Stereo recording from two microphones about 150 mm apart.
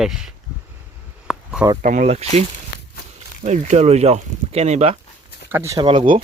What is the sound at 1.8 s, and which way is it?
Speech, 55° right (ahead or behind).